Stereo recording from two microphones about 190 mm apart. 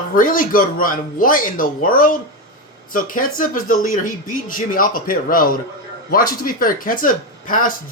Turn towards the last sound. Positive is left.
turn(degrees=45)  # may be behind; listen again after turning